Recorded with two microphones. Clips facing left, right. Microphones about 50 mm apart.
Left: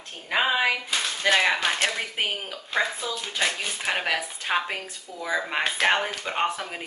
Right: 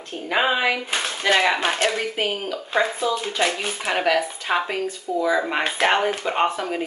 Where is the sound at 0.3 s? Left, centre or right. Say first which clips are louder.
Right 3 dB; centre.